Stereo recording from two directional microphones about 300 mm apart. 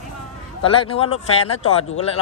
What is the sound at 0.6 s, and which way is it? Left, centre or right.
Speech, centre.